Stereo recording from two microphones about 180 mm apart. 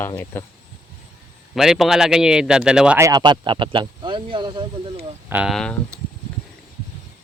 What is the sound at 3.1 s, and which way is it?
Speech, 25° right (ahead or behind).